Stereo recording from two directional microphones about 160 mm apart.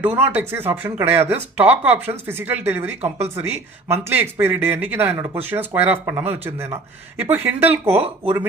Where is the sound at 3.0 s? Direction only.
40° right (ahead or behind).